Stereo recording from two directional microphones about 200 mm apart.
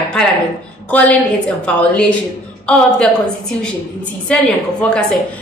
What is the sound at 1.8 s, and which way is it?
A woman's voice, 5° left (ahead or behind).